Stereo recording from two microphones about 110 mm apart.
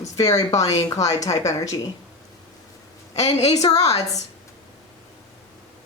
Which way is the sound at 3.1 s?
85° left.